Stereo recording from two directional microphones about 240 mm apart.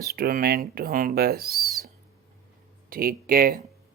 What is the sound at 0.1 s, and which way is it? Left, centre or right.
Speech, right.